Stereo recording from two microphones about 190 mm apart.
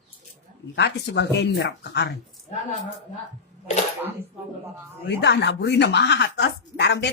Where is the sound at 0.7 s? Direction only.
65° left (ahead or behind).